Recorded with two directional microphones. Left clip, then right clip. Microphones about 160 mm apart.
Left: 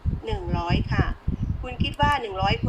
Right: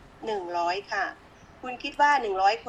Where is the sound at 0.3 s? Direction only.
20° right (ahead or behind).